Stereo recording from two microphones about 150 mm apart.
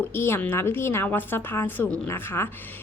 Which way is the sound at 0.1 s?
15° left (ahead or behind).